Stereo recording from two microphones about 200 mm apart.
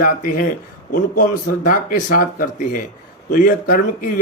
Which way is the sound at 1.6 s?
45° left (ahead or behind).